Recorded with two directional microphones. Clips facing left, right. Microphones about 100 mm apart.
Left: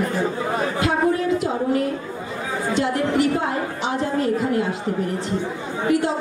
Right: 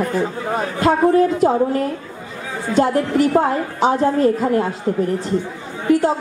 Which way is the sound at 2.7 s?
40° right (ahead or behind).